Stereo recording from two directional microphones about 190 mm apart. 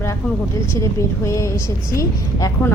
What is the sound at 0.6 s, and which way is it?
A woman's voice, 15° left (ahead or behind).